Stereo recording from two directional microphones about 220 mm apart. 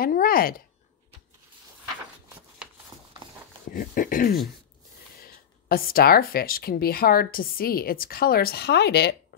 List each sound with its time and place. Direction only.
0.0 s speech: 40° left (ahead or behind)
2.9 s a sound: 15° right (ahead or behind)
3.7 s speech: 40° left (ahead or behind)